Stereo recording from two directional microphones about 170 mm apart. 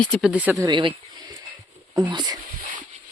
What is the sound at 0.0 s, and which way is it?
Speech, 5° left (ahead or behind).